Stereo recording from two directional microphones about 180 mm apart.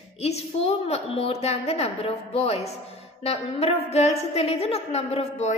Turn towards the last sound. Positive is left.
turn(degrees=35)  # may be behind; listen again after turning